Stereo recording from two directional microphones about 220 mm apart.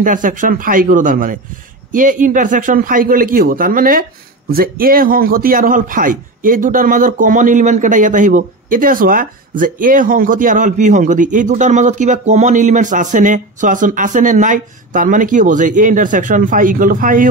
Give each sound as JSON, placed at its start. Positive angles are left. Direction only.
{"t": 0.0, "sound": "speech", "side_deg": -35}